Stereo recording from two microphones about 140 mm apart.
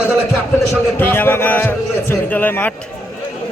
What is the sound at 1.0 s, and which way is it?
A man's voice, 15° left (ahead or behind).